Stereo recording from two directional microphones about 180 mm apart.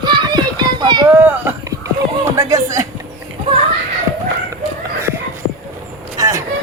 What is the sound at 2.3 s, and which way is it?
Speech, 20° right (ahead or behind).